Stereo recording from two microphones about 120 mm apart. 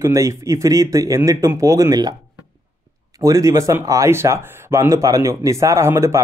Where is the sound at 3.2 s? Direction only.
25° right (ahead or behind).